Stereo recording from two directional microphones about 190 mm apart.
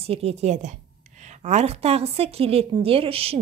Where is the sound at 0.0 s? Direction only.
30° right (ahead or behind).